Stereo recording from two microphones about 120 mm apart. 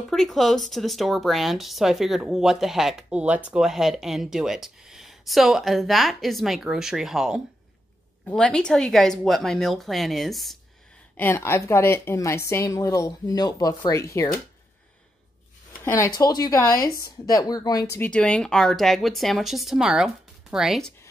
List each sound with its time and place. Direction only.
0.1 s speech: centre (ahead or behind)
8.3 s speech: 5° left (ahead or behind)
11.1 s speech: 20° left (ahead or behind)
15.8 s speech: 20° left (ahead or behind)
18.1 s speech: 10° left (ahead or behind)